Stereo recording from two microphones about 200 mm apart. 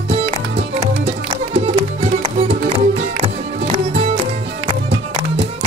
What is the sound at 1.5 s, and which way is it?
Music, 30° right (ahead or behind).